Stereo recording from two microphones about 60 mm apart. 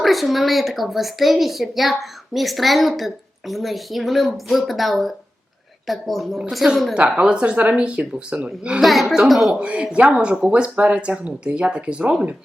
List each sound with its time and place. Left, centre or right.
0.0 s a woman's voice: centre
6.9 s speech: centre
8.8 s a woman's voice: centre
9.5 s speech: centre